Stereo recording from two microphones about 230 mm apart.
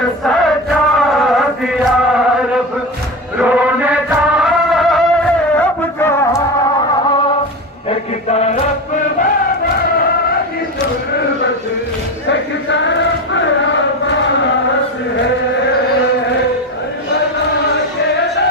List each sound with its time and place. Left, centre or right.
0.3 s chant: centre
3.3 s chant: centre
4.4 s music: centre
7.9 s chant: left
12.3 s a sound: left